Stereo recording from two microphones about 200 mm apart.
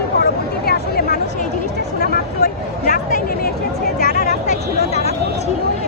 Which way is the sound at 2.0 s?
45° left (ahead or behind).